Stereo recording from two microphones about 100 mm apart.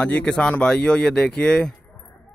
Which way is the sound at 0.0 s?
10° left (ahead or behind).